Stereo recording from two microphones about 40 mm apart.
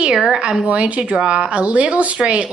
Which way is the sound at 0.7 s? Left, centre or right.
Right.